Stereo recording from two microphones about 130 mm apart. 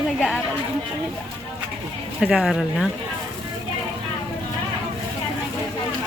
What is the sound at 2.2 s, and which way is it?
Speech, 5° right (ahead or behind).